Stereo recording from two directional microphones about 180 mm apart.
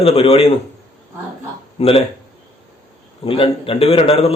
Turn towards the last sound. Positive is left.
turn(degrees=35)  # may be behind; listen again after turning